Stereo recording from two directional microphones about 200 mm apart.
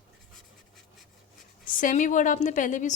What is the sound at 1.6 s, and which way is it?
A woman's voice, 40° left (ahead or behind).